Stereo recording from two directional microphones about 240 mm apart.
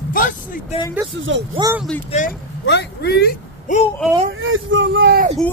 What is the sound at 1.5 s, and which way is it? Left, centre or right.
Speech, centre.